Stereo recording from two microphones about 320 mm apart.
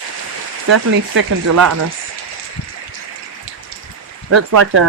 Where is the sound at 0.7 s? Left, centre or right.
Right.